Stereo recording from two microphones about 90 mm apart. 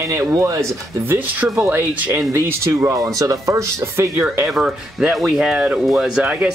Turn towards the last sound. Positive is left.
turn(degrees=-10)  # may be behind; listen again after turning